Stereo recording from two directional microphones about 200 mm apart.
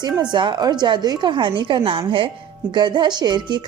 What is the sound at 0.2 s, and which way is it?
Speech, 20° right (ahead or behind).